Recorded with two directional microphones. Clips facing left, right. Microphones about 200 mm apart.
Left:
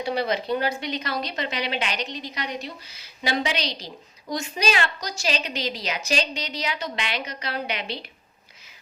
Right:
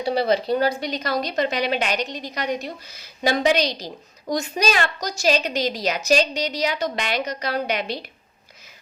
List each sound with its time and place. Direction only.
0.0 s speech: 35° right (ahead or behind)